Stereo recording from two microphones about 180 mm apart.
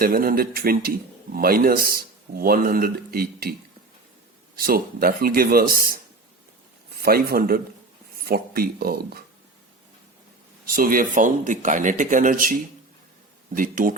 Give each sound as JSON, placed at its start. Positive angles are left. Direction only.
{"t": 0.0, "sound": "speech", "side_deg": -55}
{"t": 4.5, "sound": "speech", "side_deg": -55}
{"t": 10.7, "sound": "speech", "side_deg": -50}